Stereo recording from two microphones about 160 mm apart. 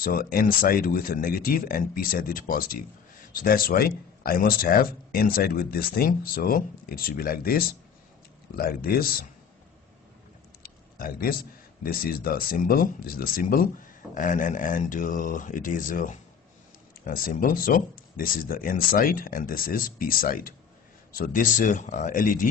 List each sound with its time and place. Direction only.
0.0 s speech: 65° left (ahead or behind)
10.6 s speech: 65° left (ahead or behind)